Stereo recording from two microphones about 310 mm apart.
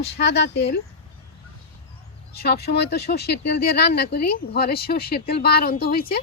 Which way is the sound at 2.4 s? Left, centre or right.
Left.